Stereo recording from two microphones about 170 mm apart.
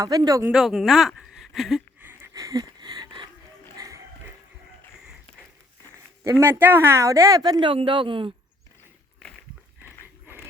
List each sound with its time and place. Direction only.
0.0 s speech: 20° right (ahead or behind)
0.5 s speech: centre (ahead or behind)
2.0 s a sound: 15° right (ahead or behind)
3.8 s music: 20° right (ahead or behind)
6.4 s speech: 10° right (ahead or behind); by 8.3 s 30° right (ahead or behind)